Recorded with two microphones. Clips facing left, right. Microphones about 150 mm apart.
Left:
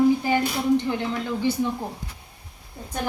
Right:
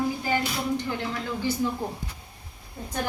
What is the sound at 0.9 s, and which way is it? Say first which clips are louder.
Speech: left 4 dB; 20° left (ahead or behind).